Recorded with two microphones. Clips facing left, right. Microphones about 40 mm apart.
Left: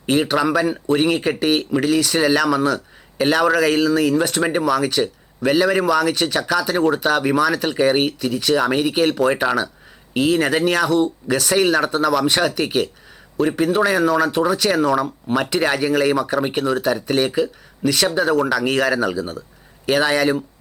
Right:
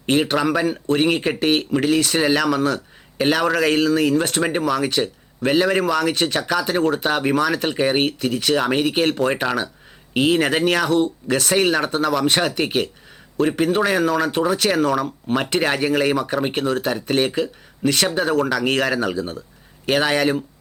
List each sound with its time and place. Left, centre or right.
0.1 s speech: centre
6.1 s speech: centre
15.4 s speech: centre